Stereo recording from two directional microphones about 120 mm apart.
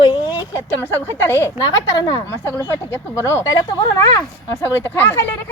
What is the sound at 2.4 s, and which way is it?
A woman's voice, 25° left (ahead or behind).